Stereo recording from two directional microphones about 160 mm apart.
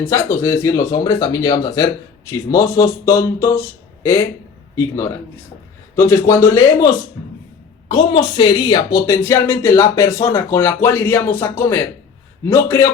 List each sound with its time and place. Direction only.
0.0 s speech: 15° left (ahead or behind)
6.0 s speech: 15° left (ahead or behind)
7.2 s speech: 5° left (ahead or behind)
7.9 s speech: 30° left (ahead or behind)